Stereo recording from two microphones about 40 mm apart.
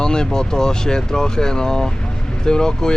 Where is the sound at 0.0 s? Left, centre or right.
Centre.